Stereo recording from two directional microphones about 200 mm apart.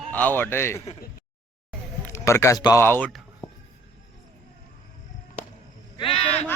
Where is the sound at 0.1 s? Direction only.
10° left (ahead or behind).